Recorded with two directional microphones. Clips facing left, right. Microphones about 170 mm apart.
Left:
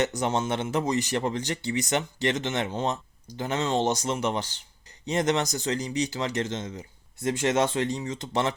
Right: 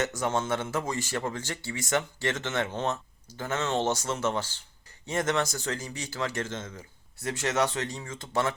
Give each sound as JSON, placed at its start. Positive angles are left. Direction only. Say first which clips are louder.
{"t": 0.0, "sound": "speech", "louder": "left 3 dB", "side_deg": 20}